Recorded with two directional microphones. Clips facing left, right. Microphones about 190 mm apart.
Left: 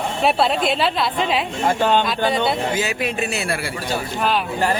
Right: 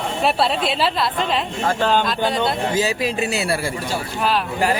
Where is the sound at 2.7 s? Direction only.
35° right (ahead or behind).